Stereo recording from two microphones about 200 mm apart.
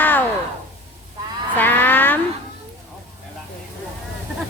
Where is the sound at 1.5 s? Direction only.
10° left (ahead or behind).